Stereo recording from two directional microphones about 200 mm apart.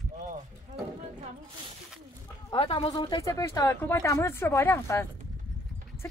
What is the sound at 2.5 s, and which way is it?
Speech, 25° left (ahead or behind).